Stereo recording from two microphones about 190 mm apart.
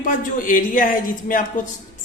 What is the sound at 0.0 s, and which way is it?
Speech, 45° left (ahead or behind).